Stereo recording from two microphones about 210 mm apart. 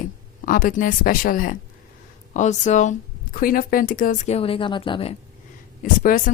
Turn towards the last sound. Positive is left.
turn(degrees=40)  # may be behind; listen again after turning